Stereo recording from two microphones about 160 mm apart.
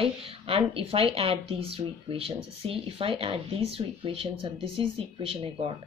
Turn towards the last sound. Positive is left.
turn(degrees=-35)  # may be behind; listen again after turning